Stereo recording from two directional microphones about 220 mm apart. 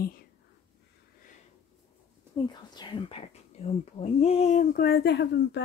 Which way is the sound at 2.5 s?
20° left (ahead or behind).